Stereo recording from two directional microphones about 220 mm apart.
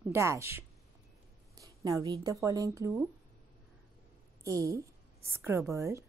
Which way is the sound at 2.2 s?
15° right (ahead or behind).